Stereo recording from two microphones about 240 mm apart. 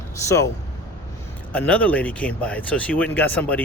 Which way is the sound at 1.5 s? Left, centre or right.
Centre.